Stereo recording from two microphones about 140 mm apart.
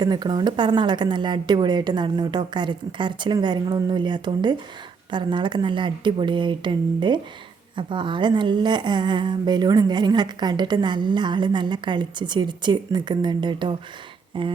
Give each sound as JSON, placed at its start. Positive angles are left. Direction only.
{"t": 0.0, "sound": "a woman's voice", "side_deg": -30}